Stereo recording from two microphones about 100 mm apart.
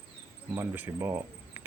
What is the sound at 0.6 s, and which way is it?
Speech, 20° right (ahead or behind).